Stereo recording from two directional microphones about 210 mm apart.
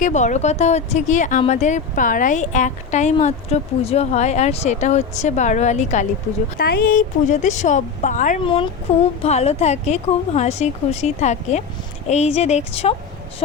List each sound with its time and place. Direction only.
0.0 s speech: 35° left (ahead or behind)